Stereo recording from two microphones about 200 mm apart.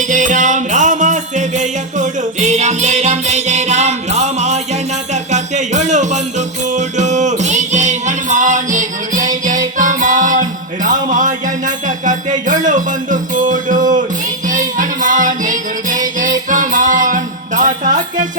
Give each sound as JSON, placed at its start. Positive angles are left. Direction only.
{"t": 0.1, "sound": "music", "side_deg": -40}